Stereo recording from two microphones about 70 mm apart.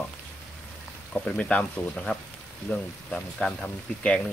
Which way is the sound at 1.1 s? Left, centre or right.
Centre.